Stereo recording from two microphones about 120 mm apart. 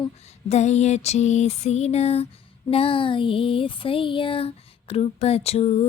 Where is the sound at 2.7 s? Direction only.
50° left (ahead or behind).